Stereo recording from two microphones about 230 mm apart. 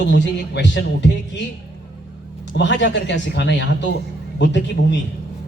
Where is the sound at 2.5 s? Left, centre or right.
Left.